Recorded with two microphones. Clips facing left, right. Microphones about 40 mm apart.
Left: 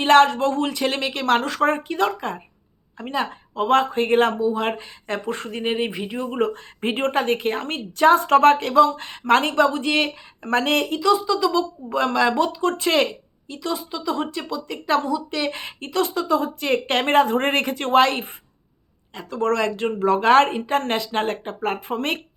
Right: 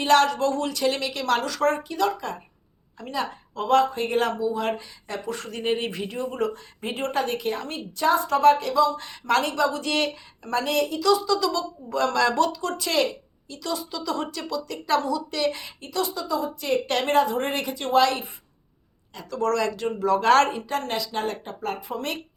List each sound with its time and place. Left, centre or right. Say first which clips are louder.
0.0 s a woman's voice: left 4 dB; left
5.5 s speech: left 1 dB; left
6.3 s a woman's voice: left 4 dB; left
9.8 s speech: left 4 dB; left
10.4 s speech: left 4 dB; left
11.0 s speech: left 2 dB; left
15.6 s a woman's voice: left 5 dB; left